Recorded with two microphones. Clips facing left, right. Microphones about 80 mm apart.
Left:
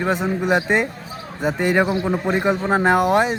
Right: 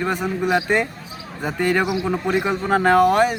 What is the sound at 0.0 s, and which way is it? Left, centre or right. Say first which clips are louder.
Speech: left 1 dB; left.